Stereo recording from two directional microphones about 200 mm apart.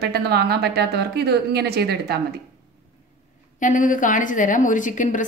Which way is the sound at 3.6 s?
40° left (ahead or behind).